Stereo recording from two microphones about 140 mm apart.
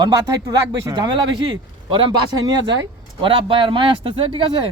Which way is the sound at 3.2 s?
40° right (ahead or behind).